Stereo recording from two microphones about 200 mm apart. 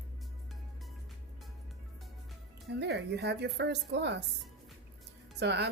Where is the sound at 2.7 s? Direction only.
55° right (ahead or behind).